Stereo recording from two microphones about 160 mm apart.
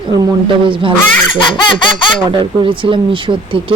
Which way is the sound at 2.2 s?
30° right (ahead or behind).